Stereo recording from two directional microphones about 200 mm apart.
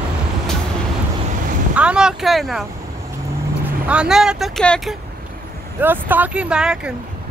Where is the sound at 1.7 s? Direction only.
5° right (ahead or behind).